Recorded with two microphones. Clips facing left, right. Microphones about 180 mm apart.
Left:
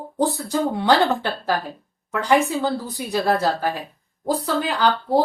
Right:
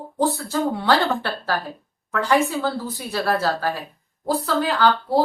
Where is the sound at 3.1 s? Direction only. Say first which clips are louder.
Left 2 dB; 15° left (ahead or behind).